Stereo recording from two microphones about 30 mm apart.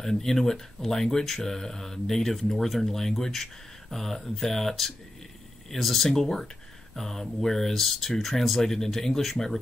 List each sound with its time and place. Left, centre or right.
0.0 s speech: centre
6.2 s speech: centre